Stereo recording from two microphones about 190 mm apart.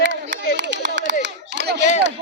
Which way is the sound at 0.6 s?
70° right (ahead or behind).